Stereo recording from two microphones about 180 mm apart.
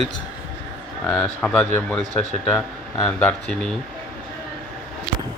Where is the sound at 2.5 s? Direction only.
20° left (ahead or behind).